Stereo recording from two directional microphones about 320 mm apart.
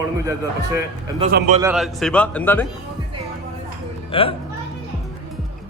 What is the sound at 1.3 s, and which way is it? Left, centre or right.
Speech, right.